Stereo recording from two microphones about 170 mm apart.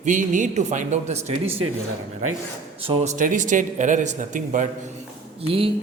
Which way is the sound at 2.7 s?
35° right (ahead or behind).